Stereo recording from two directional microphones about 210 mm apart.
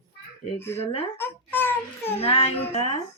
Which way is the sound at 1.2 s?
10° left (ahead or behind).